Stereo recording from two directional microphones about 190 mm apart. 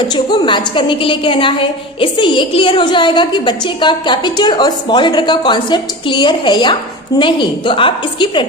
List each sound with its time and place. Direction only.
0.1 s a woman's voice: 25° left (ahead or behind)